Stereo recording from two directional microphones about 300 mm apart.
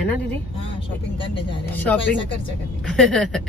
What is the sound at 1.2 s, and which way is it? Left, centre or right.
Speech, centre.